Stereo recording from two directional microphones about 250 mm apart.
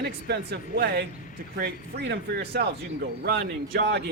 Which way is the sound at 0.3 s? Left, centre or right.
Right.